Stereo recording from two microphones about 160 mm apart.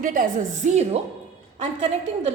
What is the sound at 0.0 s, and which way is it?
A woman's voice, 55° right (ahead or behind).